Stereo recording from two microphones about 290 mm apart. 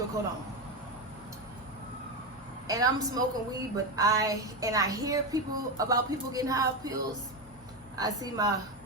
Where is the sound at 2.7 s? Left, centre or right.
Centre.